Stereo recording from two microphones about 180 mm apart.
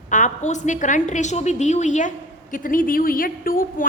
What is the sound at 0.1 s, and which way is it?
A woman's voice, 45° left (ahead or behind).